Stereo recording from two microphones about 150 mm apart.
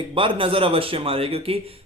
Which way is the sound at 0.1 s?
35° right (ahead or behind).